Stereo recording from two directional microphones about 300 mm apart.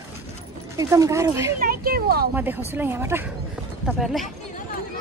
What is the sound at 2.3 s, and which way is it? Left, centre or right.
Speech, centre.